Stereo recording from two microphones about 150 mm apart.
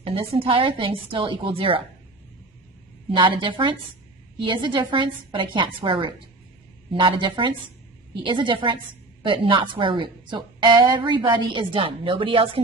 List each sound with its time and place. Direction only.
0.0 s a woman's voice: 35° right (ahead or behind)
3.1 s a woman's voice: 35° right (ahead or behind)